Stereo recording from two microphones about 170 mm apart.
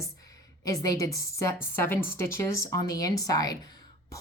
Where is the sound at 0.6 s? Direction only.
20° left (ahead or behind).